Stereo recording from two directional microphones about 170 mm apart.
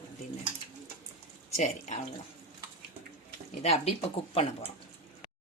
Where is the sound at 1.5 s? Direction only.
40° left (ahead or behind).